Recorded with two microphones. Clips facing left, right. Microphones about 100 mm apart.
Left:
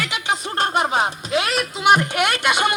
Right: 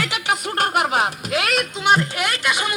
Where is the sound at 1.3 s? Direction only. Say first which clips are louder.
Left 1 dB; centre (ahead or behind).